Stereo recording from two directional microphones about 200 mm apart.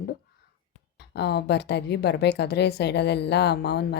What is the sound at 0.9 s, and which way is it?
A woman's voice, 55° left (ahead or behind).